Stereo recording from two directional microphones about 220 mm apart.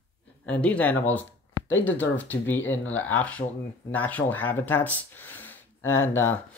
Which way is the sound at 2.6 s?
60° left (ahead or behind).